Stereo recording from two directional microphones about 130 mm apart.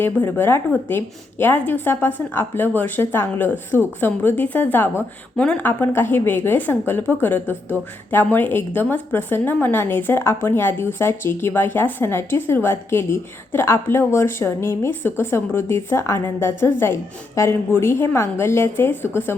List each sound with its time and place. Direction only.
0.0 s a woman's voice: 15° left (ahead or behind)